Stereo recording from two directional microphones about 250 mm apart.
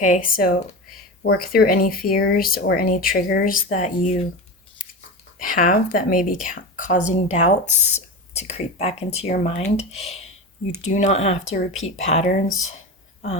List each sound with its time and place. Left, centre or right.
0.0 s speech: left
5.4 s speech: left
12.5 s speech: left